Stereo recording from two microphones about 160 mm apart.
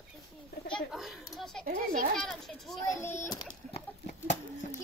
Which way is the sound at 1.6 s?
55° right (ahead or behind).